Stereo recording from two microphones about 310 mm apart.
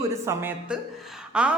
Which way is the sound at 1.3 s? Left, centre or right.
Centre.